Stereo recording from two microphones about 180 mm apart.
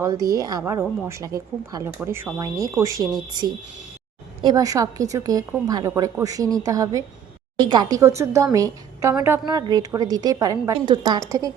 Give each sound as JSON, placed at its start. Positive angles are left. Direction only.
{"t": 0.3, "sound": "a woman's voice", "side_deg": -20}